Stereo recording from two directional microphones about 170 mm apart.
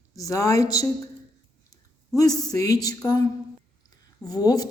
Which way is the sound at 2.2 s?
20° left (ahead or behind).